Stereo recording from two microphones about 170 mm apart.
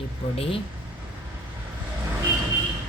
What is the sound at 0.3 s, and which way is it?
Speech, 35° left (ahead or behind).